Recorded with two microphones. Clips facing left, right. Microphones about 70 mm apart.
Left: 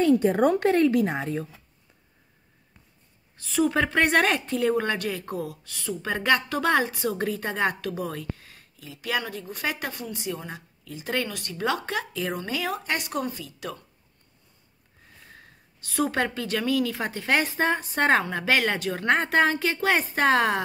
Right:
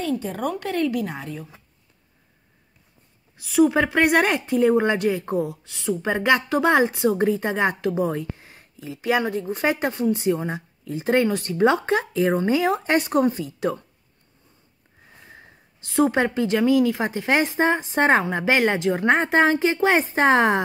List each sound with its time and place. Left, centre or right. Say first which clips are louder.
0.2 s speech: left 6 dB; left
0.7 s speech: left 3 dB; left
3.3 s a woman's voice: right 5 dB; centre; by 13.7 s right
15.2 s a woman's voice: right 3 dB; right